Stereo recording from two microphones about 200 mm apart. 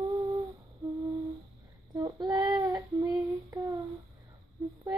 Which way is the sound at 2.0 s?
20° right (ahead or behind).